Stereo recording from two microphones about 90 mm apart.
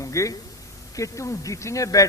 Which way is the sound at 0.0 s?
35° left (ahead or behind).